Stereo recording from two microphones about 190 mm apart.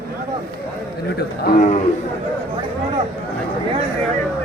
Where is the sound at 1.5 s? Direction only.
40° left (ahead or behind).